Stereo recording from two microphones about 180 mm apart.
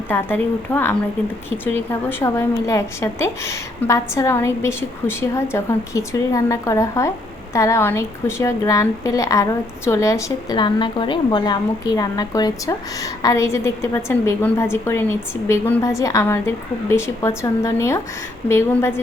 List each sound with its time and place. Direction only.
0.1 s a woman's voice: 10° left (ahead or behind)